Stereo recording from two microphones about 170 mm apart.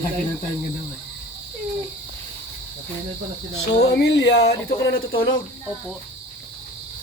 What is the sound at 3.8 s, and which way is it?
Speech, 80° left.